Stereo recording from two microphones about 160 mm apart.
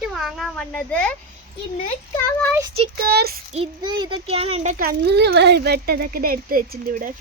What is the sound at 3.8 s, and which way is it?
A child's voice, 30° right (ahead or behind).